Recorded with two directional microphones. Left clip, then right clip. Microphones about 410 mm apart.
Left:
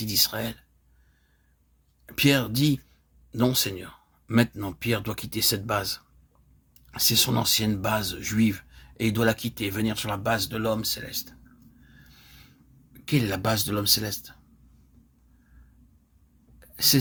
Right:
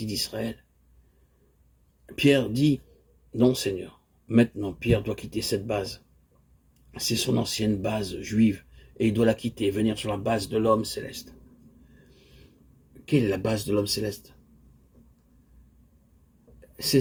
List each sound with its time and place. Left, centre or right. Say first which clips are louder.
0.0 s speech: left 5 dB; left
2.1 s speech: right 1 dB; left
6.9 s speech: left 4 dB; left
13.1 s speech: right 1 dB; left
16.7 s speech: left 2 dB; left